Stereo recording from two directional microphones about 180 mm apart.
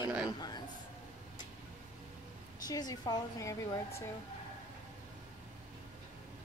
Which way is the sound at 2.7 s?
20° left (ahead or behind).